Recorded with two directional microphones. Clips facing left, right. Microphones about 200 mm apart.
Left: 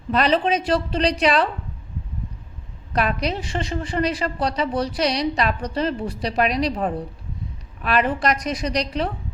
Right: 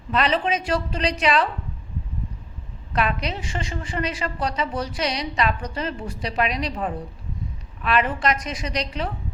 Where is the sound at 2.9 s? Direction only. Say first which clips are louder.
Left 2 dB; 40° left (ahead or behind).